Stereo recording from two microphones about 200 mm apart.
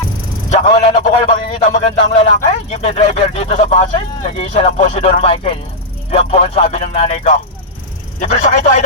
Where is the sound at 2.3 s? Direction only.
35° left (ahead or behind).